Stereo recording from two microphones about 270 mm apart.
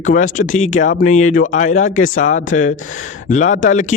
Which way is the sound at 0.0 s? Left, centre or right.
Left.